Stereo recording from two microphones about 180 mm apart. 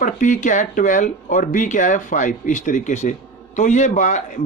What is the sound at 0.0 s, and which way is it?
Speech, 45° left (ahead or behind).